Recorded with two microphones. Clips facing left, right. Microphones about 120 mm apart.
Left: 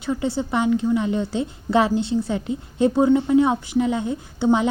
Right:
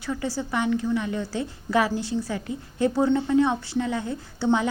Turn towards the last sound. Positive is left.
turn(degrees=20)  # may be behind; listen again after turning